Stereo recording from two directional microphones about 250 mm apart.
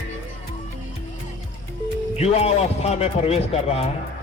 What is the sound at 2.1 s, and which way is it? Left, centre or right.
A man's voice, left.